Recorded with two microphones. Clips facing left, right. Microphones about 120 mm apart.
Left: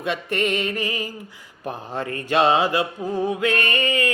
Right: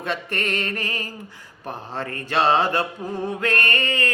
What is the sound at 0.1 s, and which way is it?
Music, 15° left (ahead or behind).